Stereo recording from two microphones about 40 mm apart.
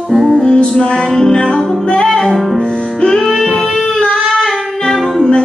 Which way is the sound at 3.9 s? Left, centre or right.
Centre.